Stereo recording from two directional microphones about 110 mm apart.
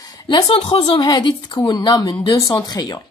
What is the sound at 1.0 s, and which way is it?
Speech, 40° left (ahead or behind).